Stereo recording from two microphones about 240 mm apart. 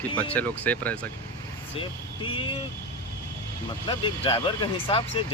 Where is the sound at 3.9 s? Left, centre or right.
Left.